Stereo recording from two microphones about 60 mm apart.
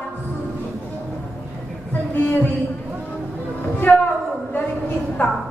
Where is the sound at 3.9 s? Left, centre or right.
Left.